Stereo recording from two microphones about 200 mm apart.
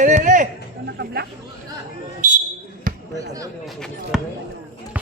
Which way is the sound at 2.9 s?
45° right (ahead or behind).